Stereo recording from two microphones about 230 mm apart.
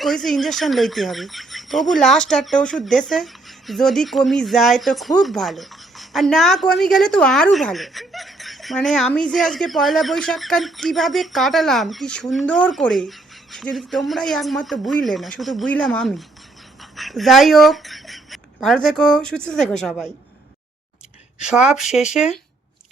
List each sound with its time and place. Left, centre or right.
0.0 s speech: centre
21.3 s speech: centre